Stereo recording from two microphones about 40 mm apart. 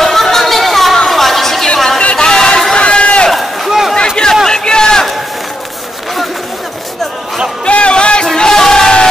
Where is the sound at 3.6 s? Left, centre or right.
Centre.